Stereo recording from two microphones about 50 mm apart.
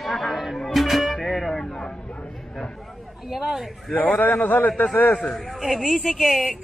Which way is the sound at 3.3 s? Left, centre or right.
Centre.